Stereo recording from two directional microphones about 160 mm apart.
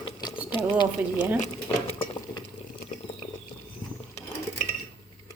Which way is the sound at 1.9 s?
30° left (ahead or behind).